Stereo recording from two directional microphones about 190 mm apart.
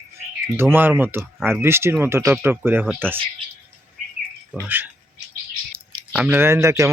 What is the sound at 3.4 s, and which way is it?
Bird, 30° right (ahead or behind).